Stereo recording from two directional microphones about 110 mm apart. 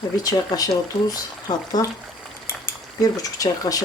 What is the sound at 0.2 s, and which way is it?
Speech, 35° left (ahead or behind).